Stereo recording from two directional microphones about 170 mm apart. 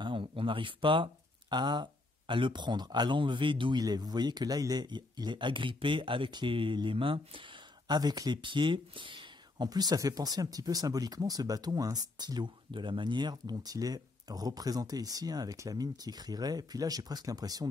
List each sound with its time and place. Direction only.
0.0 s speech: 30° right (ahead or behind)